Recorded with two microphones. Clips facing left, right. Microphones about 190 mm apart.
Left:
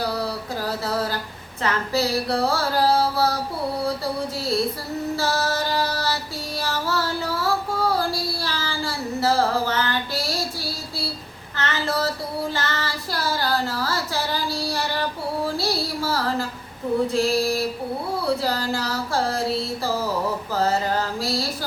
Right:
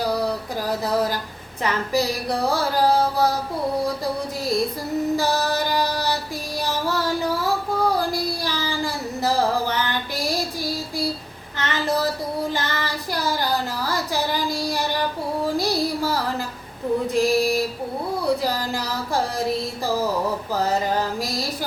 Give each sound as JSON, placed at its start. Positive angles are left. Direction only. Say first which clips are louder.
{"t": 0.3, "sound": "a sound", "louder": "right 2 dB", "side_deg": -15}
{"t": 1.6, "sound": "female singing", "louder": "right 1 dB", "side_deg": -15}
{"t": 4.4, "sound": "female singing", "louder": "right 1 dB", "side_deg": -15}
{"t": 7.8, "sound": "child singing", "louder": "right 1 dB", "side_deg": -15}
{"t": 17.1, "sound": "female singing", "louder": "right 2 dB", "side_deg": -15}